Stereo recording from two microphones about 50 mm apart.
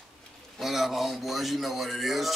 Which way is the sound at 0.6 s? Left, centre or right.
Centre.